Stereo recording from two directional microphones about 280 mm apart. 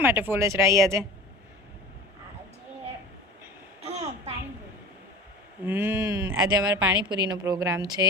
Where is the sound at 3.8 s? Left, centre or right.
Right.